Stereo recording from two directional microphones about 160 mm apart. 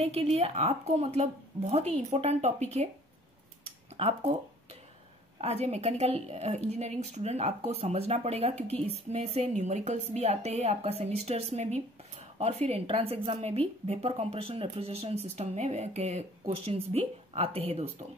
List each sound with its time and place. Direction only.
0.0 s a woman's voice: 40° right (ahead or behind)
3.9 s speech: 40° right (ahead or behind)
5.4 s a woman's voice: 40° right (ahead or behind)